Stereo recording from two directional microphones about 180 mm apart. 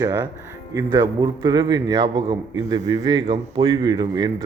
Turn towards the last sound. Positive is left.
turn(degrees=-25)  # may be behind; listen again after turning